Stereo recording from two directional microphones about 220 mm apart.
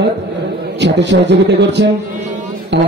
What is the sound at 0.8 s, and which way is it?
A man's voice, 55° right (ahead or behind).